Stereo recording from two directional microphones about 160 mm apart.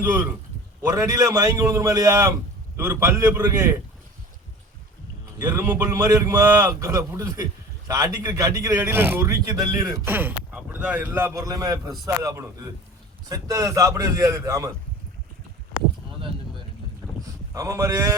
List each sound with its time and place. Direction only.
0.0 s a man's voice: 15° right (ahead or behind)
5.4 s a man's voice: 15° right (ahead or behind)
17.0 s boat: centre (ahead or behind)
17.5 s a man's voice: 20° right (ahead or behind)